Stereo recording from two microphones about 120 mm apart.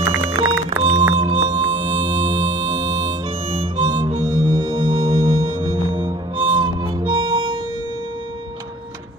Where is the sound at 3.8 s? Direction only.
40° right (ahead or behind).